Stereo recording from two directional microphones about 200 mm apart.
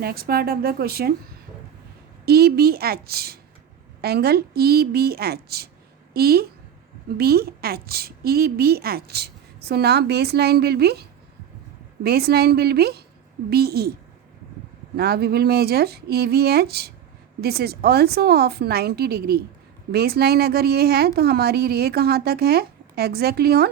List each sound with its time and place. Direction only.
0.0 s a woman's voice: 50° right (ahead or behind)
2.2 s a woman's voice: 50° right (ahead or behind)
12.0 s a woman's voice: 50° right (ahead or behind)
14.9 s a woman's voice: 50° right (ahead or behind)